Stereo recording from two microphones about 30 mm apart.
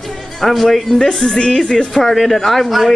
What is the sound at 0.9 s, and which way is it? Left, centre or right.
Speech, left.